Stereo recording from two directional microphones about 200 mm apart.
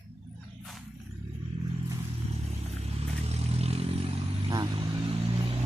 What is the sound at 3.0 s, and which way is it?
Vehicle, 30° right (ahead or behind).